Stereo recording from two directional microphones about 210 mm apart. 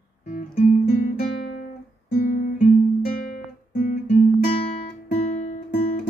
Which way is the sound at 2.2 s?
40° left (ahead or behind).